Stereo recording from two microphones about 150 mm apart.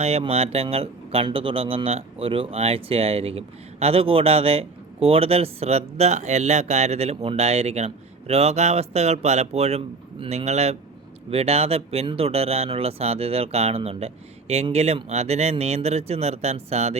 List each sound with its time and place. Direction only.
0.0 s speech: 45° right (ahead or behind)